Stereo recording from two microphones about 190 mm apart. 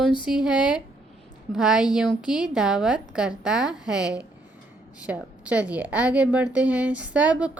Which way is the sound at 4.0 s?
20° left (ahead or behind).